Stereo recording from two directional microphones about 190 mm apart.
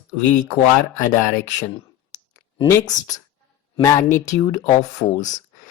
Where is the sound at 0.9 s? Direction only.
45° left (ahead or behind).